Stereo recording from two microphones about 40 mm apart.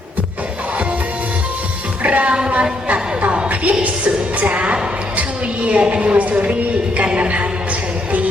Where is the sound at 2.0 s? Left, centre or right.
Right.